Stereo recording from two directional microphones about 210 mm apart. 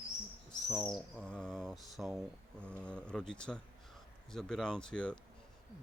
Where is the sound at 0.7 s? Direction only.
Centre (ahead or behind).